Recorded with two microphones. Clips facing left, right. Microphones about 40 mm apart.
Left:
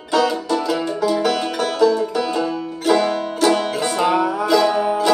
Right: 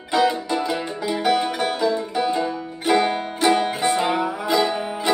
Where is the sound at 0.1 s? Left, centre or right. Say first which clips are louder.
Left 2 dB; right.